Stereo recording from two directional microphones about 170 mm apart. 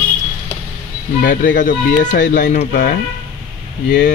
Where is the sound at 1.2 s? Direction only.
50° left (ahead or behind).